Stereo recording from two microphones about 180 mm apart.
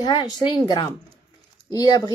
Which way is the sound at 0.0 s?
25° left (ahead or behind).